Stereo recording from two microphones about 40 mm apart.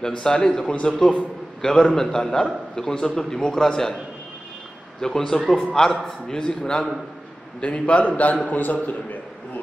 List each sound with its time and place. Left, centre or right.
0.0 s a man's voice: centre
5.0 s a man's voice: centre
7.6 s a man's voice: left
8.8 s a sound: left